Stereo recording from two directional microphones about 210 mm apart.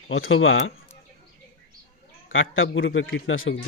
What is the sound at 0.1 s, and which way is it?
Speech, 70° left (ahead or behind).